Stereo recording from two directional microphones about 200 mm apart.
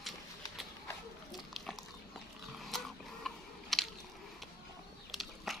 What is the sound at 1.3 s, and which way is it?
Dog, centre (ahead or behind).